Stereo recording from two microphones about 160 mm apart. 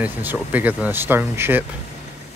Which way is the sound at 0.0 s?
10° right (ahead or behind).